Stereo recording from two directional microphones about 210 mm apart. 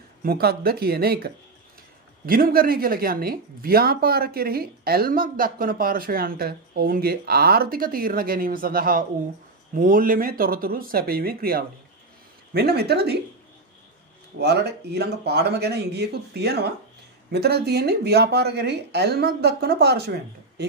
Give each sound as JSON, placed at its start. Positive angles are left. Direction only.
{"t": 0.2, "sound": "speech", "side_deg": -45}
{"t": 14.4, "sound": "speech", "side_deg": -50}